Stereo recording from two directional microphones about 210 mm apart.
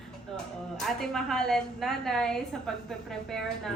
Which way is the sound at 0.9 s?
Centre (ahead or behind).